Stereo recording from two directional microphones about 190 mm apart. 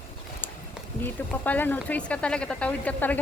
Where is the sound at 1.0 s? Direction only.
10° left (ahead or behind).